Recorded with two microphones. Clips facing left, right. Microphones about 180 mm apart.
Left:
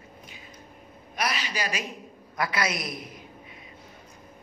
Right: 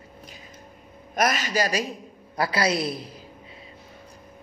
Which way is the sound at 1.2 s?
45° right (ahead or behind).